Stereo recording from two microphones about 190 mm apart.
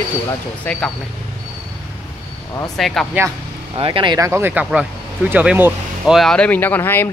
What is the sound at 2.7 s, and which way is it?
Speech, centre (ahead or behind).